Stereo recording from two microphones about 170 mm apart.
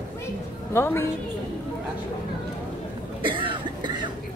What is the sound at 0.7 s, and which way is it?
Speech, 15° left (ahead or behind).